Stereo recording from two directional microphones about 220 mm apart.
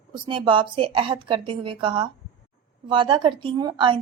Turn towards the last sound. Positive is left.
turn(degrees=-20)  # may be behind; listen again after turning